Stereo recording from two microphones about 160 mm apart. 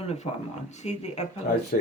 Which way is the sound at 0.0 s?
40° left (ahead or behind).